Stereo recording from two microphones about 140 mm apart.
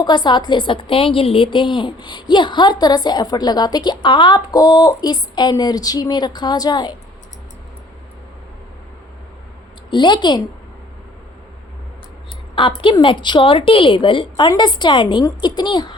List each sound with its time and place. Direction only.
0.0 s a woman's voice: 30° left (ahead or behind)
9.9 s a woman's voice: 35° left (ahead or behind)
12.5 s a woman's voice: 35° left (ahead or behind)